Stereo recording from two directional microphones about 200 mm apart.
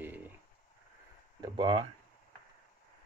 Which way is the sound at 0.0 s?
10° right (ahead or behind).